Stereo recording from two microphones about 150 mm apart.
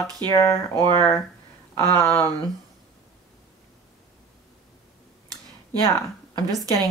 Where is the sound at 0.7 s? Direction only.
30° right (ahead or behind).